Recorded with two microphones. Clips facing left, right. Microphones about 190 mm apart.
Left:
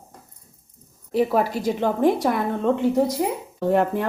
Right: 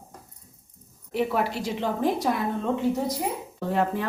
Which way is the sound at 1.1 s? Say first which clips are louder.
Left 5 dB; 40° left (ahead or behind).